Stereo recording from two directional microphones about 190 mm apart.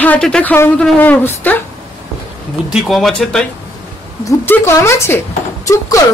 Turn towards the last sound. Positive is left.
turn(degrees=15)  # may be behind; listen again after turning